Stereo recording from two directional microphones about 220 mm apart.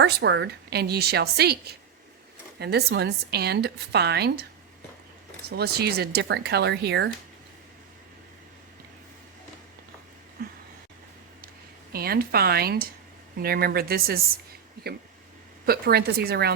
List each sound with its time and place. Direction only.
0.0 s a woman's voice: 50° right (ahead or behind)
5.5 s a woman's voice: 45° right (ahead or behind)
11.9 s a woman's voice: 45° right (ahead or behind)
15.6 s a woman's voice: 45° right (ahead or behind)